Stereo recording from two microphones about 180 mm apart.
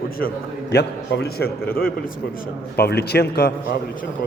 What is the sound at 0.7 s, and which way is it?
Speech, 65° left (ahead or behind).